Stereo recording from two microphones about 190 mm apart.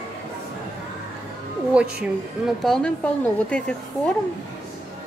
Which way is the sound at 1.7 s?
5° right (ahead or behind).